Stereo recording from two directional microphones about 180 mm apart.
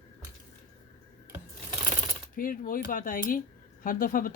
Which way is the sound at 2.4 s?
50° left (ahead or behind).